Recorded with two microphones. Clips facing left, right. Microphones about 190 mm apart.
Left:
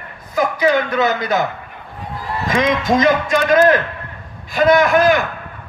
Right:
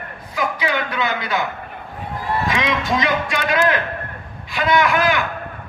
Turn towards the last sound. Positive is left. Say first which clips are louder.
# left 5 dB
turn(degrees=45)  # may be behind; listen again after turning